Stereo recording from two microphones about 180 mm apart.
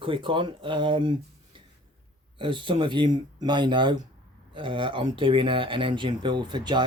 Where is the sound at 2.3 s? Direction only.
30° right (ahead or behind).